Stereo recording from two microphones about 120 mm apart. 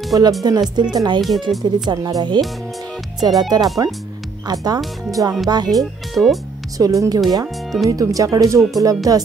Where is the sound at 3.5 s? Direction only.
30° right (ahead or behind).